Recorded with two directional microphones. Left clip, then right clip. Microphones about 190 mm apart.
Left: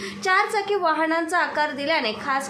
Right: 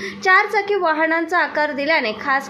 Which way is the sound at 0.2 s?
15° right (ahead or behind).